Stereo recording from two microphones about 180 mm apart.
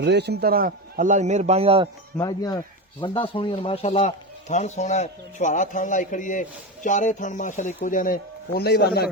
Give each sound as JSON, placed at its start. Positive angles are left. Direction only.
{"t": 0.0, "sound": "a man's voice", "side_deg": -70}
{"t": 2.1, "sound": "a man's voice", "side_deg": 20}